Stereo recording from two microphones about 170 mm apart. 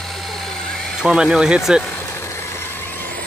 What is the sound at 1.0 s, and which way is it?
Speech, 5° right (ahead or behind).